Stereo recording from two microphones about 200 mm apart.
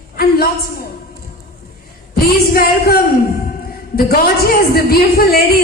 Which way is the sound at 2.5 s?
50° left (ahead or behind).